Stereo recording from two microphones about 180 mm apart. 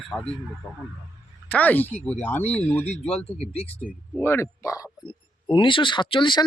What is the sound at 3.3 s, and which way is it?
Speech, 35° left (ahead or behind).